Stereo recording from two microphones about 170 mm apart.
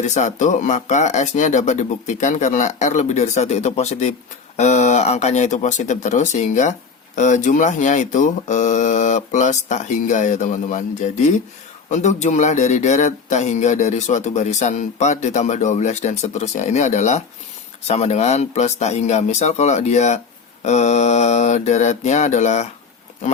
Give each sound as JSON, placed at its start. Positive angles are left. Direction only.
{"t": 0.0, "sound": "speech", "side_deg": 45}